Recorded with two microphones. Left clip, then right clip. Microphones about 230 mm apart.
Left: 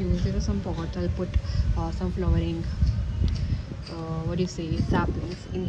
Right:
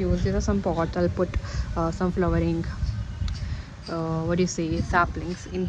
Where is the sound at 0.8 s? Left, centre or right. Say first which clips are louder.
Right 8 dB; right.